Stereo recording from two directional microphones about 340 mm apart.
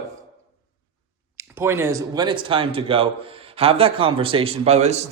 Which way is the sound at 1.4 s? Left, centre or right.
Centre.